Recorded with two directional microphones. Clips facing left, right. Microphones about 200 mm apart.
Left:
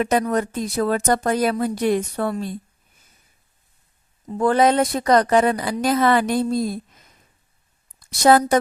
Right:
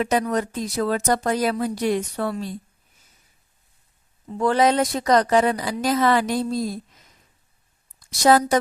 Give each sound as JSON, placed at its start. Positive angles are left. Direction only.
{"t": 0.0, "sound": "a woman's voice", "side_deg": 55}
{"t": 4.4, "sound": "a woman's voice", "side_deg": 50}
{"t": 7.9, "sound": "a woman's voice", "side_deg": 55}